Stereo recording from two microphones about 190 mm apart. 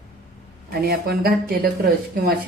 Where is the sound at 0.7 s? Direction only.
55° right (ahead or behind).